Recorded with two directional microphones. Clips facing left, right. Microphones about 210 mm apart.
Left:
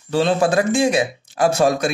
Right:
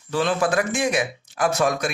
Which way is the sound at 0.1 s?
25° left (ahead or behind).